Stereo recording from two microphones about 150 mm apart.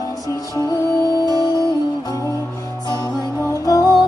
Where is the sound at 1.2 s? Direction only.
25° right (ahead or behind).